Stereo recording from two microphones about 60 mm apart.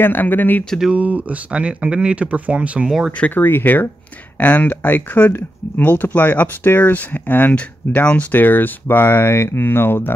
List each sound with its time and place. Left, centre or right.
0.0 s speech: left
0.9 s speech: right
3.1 s speech: left
7.5 s speech: left